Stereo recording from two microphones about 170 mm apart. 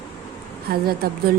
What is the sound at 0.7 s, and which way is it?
Speech, 60° right (ahead or behind).